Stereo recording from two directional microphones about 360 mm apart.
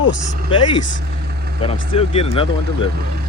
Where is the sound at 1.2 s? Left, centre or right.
Right.